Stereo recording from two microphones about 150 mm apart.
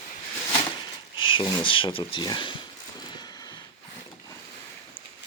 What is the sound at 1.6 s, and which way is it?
Speech, 35° left (ahead or behind).